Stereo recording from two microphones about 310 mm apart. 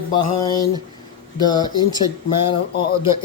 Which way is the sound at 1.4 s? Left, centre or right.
Centre.